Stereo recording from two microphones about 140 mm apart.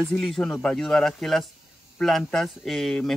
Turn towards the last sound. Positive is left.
turn(degrees=0)  # may be behind; listen again after turning